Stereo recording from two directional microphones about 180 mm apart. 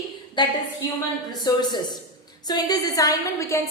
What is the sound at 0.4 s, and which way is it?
A woman's voice, 25° left (ahead or behind).